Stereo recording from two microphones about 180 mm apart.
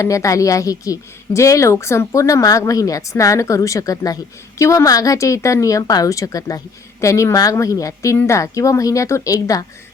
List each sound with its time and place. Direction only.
0.0 s a woman's voice: 15° left (ahead or behind)